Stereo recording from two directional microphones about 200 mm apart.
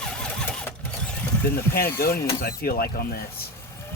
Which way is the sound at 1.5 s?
50° left (ahead or behind).